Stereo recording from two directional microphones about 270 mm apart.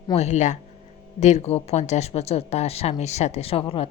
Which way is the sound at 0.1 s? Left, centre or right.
Left.